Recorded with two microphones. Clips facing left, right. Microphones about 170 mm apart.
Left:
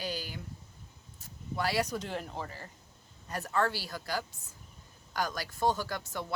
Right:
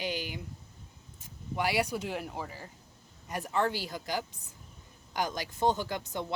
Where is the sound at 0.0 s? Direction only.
20° right (ahead or behind).